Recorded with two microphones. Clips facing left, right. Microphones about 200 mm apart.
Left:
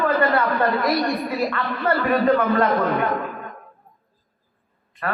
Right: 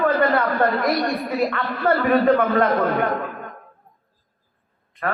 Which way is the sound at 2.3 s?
55° right (ahead or behind).